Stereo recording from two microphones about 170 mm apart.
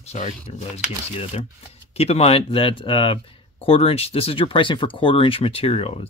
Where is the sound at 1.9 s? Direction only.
35° left (ahead or behind).